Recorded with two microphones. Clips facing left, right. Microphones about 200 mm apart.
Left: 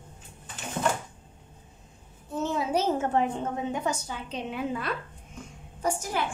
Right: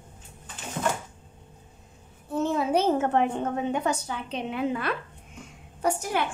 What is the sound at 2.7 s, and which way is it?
A woman's voice, 60° right (ahead or behind).